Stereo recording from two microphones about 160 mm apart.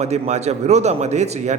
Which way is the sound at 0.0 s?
45° right (ahead or behind).